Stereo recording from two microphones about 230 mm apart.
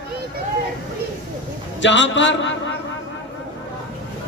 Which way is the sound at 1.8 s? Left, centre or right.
Left.